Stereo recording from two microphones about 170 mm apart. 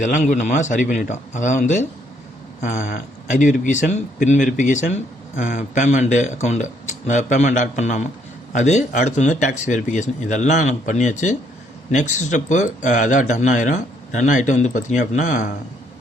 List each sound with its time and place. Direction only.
0.0 s speech: 45° left (ahead or behind)